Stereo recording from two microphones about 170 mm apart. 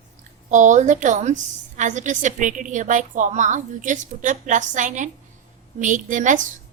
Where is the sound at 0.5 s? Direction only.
45° right (ahead or behind).